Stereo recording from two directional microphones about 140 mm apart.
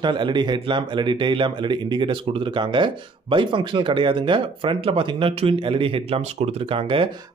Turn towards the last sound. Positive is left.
turn(degrees=-40)  # may be behind; listen again after turning